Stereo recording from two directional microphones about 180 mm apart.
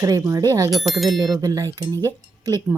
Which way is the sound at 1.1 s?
20° right (ahead or behind).